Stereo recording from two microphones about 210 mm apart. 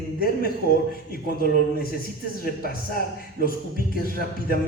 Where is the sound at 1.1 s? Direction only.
45° left (ahead or behind).